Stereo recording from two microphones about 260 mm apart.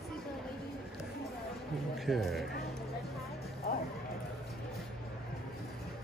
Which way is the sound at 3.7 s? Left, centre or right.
Left.